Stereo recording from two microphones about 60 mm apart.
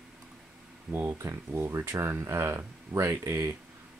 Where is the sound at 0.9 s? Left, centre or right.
Right.